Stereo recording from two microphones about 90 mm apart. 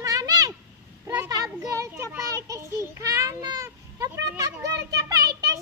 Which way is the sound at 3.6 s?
35° right (ahead or behind).